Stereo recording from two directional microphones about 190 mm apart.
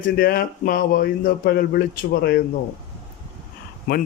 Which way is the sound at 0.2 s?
50° left (ahead or behind).